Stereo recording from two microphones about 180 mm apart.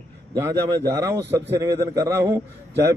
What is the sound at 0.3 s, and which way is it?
A man's voice, 20° right (ahead or behind).